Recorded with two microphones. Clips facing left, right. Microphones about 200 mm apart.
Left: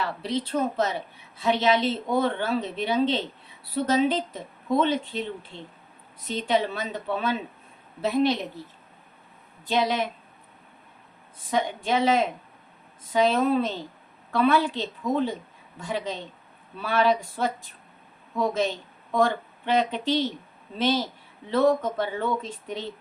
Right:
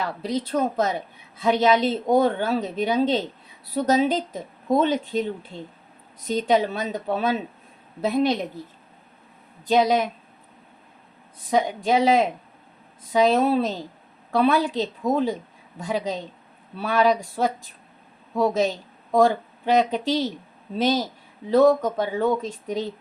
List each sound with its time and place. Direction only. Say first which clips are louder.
0.0 s a woman's voice: right 2 dB; 40° right (ahead or behind)
9.6 s a woman's voice: right 6 dB; 40° right (ahead or behind)
11.5 s a woman's voice: right 4 dB; 40° right (ahead or behind)
18.3 s a woman's voice: right 4 dB; 40° right (ahead or behind)